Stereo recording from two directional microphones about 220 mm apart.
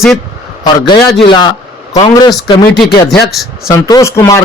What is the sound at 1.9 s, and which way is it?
Speech, 20° left (ahead or behind).